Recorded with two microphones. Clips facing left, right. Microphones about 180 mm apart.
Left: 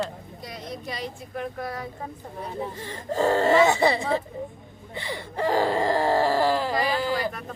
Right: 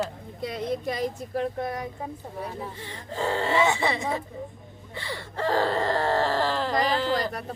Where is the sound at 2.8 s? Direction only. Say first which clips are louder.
Left 8 dB; 45° left (ahead or behind).